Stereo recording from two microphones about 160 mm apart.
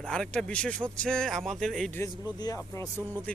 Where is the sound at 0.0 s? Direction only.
5° left (ahead or behind).